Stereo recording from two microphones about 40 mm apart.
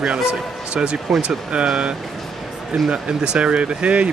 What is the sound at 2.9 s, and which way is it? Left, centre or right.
Speech, right.